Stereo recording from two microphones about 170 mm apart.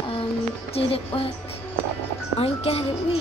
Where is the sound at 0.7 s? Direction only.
35° left (ahead or behind).